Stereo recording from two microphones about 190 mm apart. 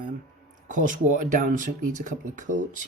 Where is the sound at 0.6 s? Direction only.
45° right (ahead or behind).